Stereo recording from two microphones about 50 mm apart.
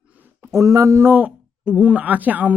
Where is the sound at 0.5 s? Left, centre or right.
Right.